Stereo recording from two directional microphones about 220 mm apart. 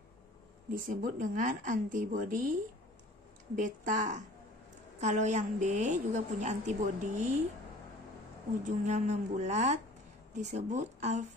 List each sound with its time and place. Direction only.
0.7 s a woman's voice: 40° right (ahead or behind)
3.5 s a woman's voice: 35° right (ahead or behind)
8.6 s a woman's voice: 30° right (ahead or behind)